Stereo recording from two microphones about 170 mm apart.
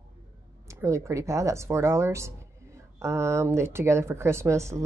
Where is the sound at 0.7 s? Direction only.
15° right (ahead or behind).